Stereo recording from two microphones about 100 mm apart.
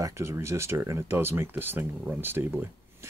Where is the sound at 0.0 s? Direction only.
30° right (ahead or behind).